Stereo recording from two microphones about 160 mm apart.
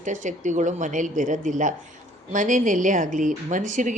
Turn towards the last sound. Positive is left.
turn(degrees=-50)  # may be behind; listen again after turning